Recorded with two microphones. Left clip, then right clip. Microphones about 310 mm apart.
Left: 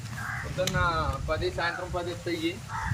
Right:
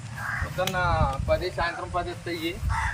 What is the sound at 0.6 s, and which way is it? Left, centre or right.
Speech, centre.